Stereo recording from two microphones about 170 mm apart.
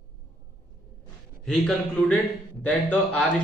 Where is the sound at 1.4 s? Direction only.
Centre (ahead or behind).